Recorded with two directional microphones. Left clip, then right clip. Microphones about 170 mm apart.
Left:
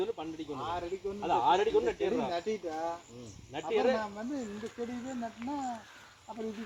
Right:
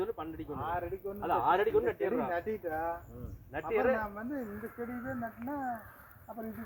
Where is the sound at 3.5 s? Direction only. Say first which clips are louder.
Left 1 dB; 30° left (ahead or behind).